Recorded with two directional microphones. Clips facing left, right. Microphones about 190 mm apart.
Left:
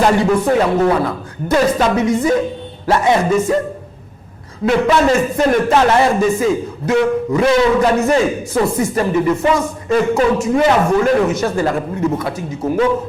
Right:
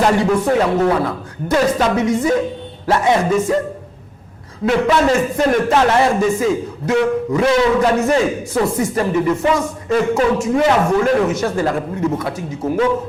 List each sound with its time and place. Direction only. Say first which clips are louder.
0.0 s a man's voice: left 1 dB; 15° left (ahead or behind)
4.6 s a man's voice: left 1 dB; 15° left (ahead or behind)